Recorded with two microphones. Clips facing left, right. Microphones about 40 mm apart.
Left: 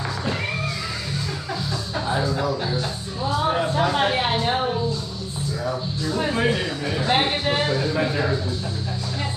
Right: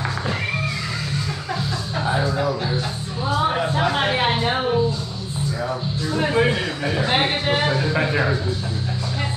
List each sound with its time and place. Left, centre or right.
2.0 s music: centre
3.3 s a sound: centre
6.0 s a man's voice: centre